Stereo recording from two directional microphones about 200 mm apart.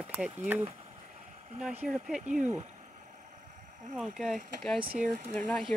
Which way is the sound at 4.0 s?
Centre (ahead or behind).